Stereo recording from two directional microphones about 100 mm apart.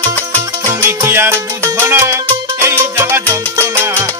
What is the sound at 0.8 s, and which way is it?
Music, 25° right (ahead or behind).